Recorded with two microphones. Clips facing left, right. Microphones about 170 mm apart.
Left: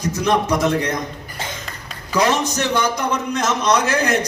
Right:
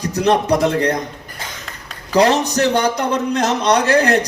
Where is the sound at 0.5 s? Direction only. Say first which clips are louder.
Right 3 dB; 35° right (ahead or behind).